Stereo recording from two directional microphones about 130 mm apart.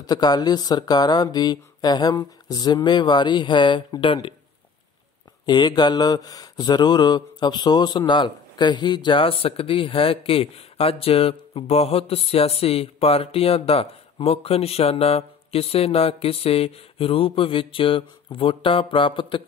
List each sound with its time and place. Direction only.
0.0 s speech: 30° left (ahead or behind)
5.5 s mantra: 35° left (ahead or behind)